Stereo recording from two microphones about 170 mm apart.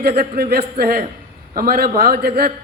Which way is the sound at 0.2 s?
65° right (ahead or behind).